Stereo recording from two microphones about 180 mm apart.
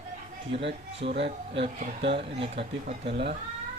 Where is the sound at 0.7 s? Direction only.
35° right (ahead or behind).